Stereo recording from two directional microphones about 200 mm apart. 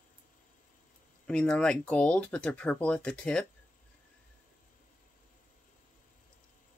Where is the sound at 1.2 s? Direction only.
5° left (ahead or behind).